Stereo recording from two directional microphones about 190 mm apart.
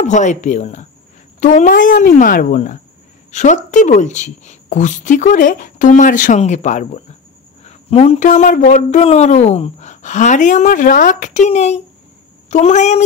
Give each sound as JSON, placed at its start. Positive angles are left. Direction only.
{"t": 0.0, "sound": "a man's voice", "side_deg": 40}